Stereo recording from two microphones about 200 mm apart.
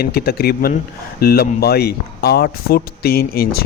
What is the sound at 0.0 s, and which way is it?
Speech, 50° left (ahead or behind).